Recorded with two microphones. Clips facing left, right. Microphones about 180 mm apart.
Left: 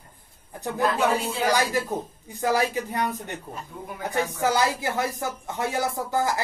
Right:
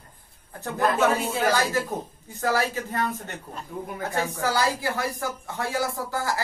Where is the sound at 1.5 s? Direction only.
15° left (ahead or behind).